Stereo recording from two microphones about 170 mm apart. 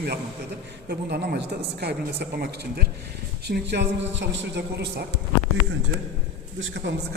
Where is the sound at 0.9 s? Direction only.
70° right (ahead or behind).